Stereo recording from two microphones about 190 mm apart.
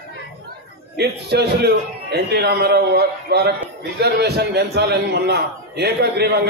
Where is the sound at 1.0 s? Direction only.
60° right (ahead or behind).